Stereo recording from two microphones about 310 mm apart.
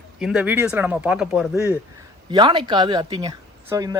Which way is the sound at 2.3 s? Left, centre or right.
Centre.